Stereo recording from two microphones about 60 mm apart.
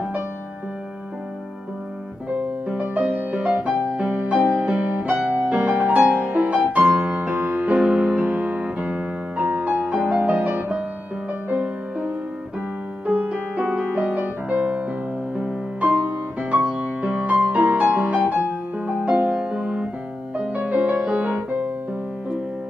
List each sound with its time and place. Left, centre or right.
2.2 s music: right
4.4 s music: centre
4.6 s music: right
5.9 s music: centre
7.8 s music: centre; by 10.8 s right
13.0 s music: right
13.3 s music: right
15.9 s music: centre; by 21.6 s right